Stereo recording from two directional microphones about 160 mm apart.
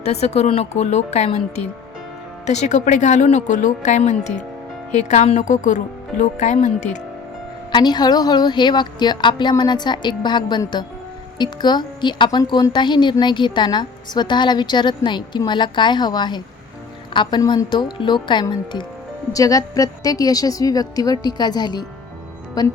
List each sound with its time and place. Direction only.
0.0 s speech: 40° left (ahead or behind)
7.7 s speech: 25° left (ahead or behind)